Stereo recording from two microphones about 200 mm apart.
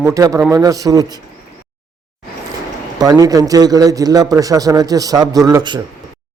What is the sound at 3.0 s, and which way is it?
A man's voice, 20° right (ahead or behind).